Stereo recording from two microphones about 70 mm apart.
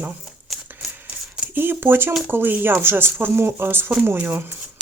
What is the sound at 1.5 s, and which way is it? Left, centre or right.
Speech, right.